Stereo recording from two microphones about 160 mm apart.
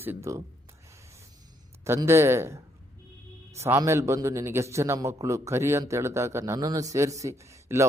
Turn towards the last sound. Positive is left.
turn(degrees=-20)  # may be behind; listen again after turning